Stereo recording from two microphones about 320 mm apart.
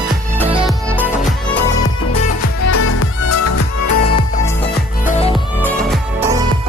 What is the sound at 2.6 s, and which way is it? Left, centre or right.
Music, left.